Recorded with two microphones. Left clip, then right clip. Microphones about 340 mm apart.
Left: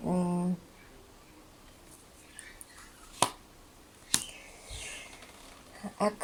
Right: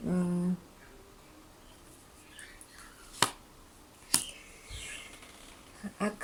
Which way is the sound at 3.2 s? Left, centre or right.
Centre.